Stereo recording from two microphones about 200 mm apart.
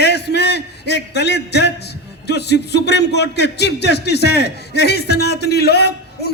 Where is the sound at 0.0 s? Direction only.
55° left (ahead or behind).